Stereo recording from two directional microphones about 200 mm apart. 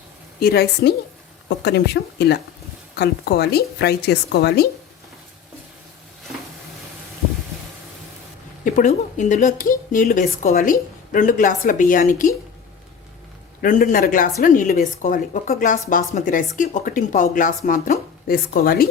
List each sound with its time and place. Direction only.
0.3 s a woman's voice: 50° left (ahead or behind)
8.6 s speech: 40° left (ahead or behind)
13.6 s speech: 40° left (ahead or behind)